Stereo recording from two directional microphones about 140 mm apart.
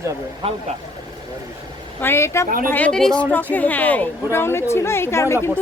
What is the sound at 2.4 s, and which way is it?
Speech, 85° right.